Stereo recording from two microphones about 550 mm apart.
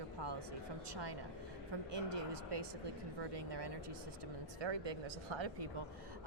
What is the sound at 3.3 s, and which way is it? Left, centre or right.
Speech, right.